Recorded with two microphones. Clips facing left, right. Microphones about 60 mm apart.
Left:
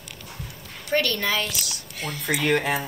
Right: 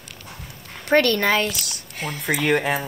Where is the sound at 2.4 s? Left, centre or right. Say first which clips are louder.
Right 2 dB; centre.